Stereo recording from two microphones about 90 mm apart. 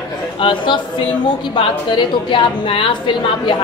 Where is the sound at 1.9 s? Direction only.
65° left (ahead or behind).